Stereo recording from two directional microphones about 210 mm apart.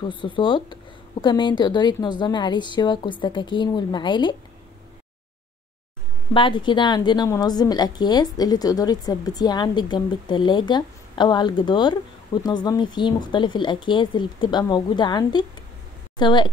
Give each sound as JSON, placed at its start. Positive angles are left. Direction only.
{"t": 0.1, "sound": "a woman's voice", "side_deg": 25}
{"t": 6.3, "sound": "a woman's voice", "side_deg": 25}